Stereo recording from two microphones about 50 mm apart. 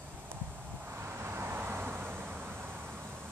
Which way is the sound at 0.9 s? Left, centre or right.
Right.